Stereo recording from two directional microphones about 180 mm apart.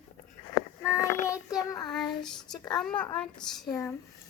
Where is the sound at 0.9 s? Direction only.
15° left (ahead or behind).